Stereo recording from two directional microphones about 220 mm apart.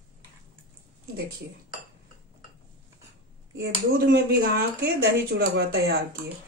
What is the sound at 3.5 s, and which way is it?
Speech, 45° right (ahead or behind).